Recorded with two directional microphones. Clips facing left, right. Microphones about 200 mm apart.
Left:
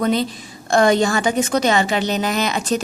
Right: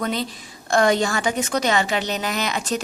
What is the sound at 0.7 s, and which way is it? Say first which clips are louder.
A woman's voice: left 3 dB; 30° left (ahead or behind).